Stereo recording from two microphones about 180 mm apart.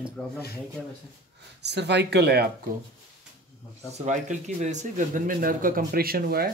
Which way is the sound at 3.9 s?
40° right (ahead or behind).